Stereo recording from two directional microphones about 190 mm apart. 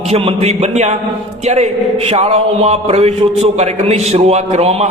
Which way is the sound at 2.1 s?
35° right (ahead or behind).